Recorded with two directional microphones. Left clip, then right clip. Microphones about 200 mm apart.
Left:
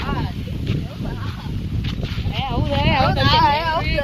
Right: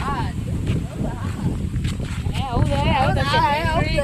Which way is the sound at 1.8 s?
20° right (ahead or behind).